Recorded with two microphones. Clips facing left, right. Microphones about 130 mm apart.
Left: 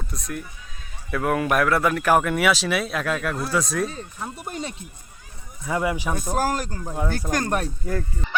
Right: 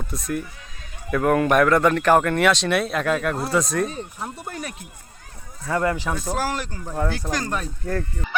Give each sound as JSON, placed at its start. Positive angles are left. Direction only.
{"t": 0.1, "sound": "speech", "side_deg": 0}
{"t": 4.4, "sound": "speech", "side_deg": 20}
{"t": 6.3, "sound": "speech", "side_deg": 45}
{"t": 6.8, "sound": "speech", "side_deg": 10}
{"t": 7.3, "sound": "speech", "side_deg": 50}